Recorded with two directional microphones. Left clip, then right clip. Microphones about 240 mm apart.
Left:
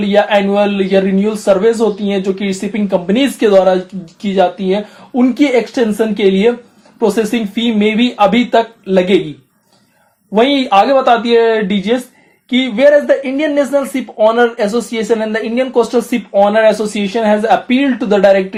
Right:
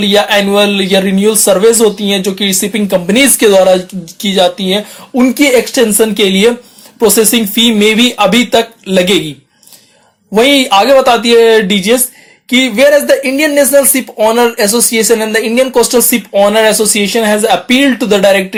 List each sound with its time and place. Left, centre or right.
0.1 s speech: right
10.3 s speech: right